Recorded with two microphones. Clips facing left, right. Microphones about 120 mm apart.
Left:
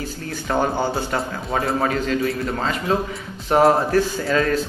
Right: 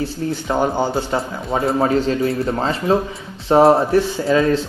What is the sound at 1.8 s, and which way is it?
A man's voice, 30° right (ahead or behind).